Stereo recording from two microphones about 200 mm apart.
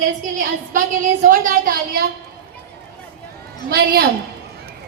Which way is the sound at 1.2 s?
45° right (ahead or behind).